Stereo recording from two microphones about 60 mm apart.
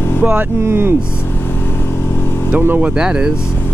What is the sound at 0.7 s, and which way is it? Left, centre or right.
Speech, right.